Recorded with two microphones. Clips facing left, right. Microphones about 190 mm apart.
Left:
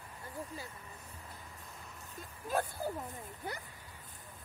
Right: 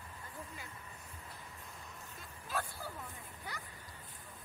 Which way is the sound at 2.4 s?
45° left (ahead or behind).